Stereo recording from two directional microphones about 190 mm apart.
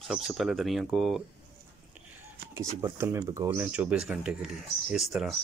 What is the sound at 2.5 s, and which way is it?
Speech, 15° right (ahead or behind).